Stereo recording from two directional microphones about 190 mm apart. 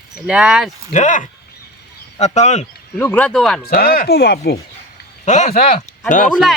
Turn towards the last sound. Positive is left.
turn(degrees=40)  # may be behind; listen again after turning